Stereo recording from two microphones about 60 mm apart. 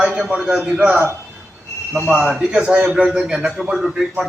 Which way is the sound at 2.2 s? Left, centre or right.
Centre.